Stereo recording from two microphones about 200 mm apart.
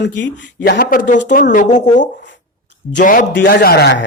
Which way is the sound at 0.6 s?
50° left (ahead or behind).